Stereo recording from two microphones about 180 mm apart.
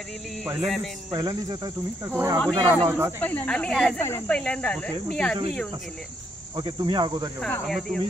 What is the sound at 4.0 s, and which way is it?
Speech, 15° left (ahead or behind).